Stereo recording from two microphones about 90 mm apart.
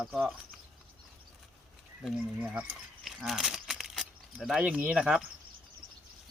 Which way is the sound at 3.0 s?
5° right (ahead or behind).